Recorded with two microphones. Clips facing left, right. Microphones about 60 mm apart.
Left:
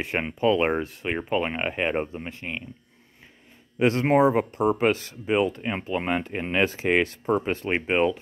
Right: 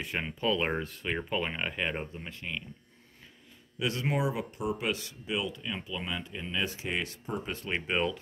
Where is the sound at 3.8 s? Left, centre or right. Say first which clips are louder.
Left 11 dB; left.